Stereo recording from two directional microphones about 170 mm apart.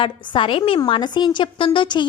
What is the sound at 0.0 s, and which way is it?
A woman's voice, 30° left (ahead or behind).